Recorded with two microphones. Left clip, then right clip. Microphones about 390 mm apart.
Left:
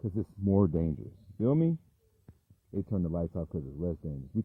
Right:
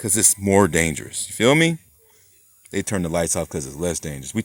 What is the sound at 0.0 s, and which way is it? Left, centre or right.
Speech, right.